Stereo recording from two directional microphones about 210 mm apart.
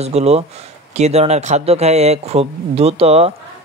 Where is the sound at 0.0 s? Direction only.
30° right (ahead or behind).